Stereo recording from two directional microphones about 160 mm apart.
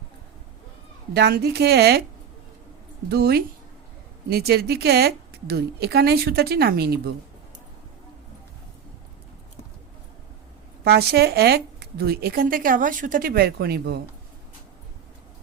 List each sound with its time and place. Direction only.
1.1 s a woman's voice: 90° right
3.1 s speech: 80° right
10.8 s speech: 85° right